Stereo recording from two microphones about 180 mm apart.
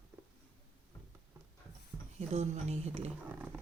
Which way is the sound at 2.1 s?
35° right (ahead or behind).